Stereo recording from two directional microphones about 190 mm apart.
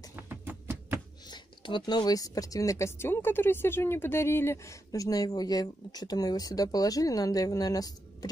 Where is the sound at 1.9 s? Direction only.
20° left (ahead or behind).